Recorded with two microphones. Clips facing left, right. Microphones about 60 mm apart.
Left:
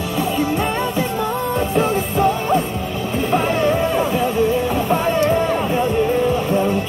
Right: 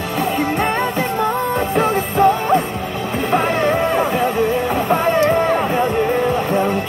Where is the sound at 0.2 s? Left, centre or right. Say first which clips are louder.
Right 1 dB; right.